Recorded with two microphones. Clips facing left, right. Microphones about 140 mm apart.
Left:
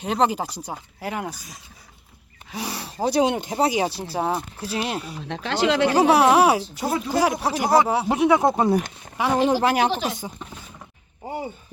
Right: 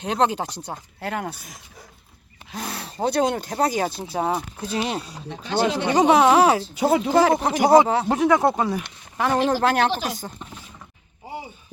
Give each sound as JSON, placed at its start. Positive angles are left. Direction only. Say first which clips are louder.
{"t": 0.0, "sound": "speech", "louder": "even", "side_deg": 5}
{"t": 1.3, "sound": "speech", "louder": "even", "side_deg": -65}
{"t": 2.6, "sound": "speech", "louder": "even", "side_deg": 5}
{"t": 3.2, "sound": "speech", "louder": "left 1 dB", "side_deg": 20}
{"t": 3.8, "sound": "speech", "louder": "left 1 dB", "side_deg": 5}
{"t": 5.3, "sound": "speech", "louder": "left 1 dB", "side_deg": 90}
{"t": 5.9, "sound": "speech", "louder": "right 2 dB", "side_deg": 5}
{"t": 6.7, "sound": "speech", "louder": "right 6 dB", "side_deg": -90}
{"t": 7.2, "sound": "speech", "louder": "right 3 dB", "side_deg": 5}